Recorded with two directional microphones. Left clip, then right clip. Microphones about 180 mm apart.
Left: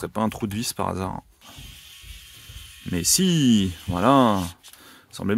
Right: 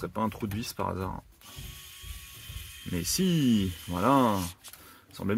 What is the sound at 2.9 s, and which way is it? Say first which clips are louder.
Speech: left 8 dB; 60° left (ahead or behind).